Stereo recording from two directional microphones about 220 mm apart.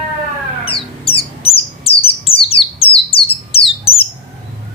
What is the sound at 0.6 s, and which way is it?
Bird, 25° left (ahead or behind).